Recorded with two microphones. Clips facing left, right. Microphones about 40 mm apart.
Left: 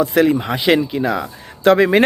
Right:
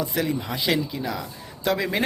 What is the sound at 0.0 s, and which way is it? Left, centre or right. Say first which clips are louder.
Speech: left 11 dB; left.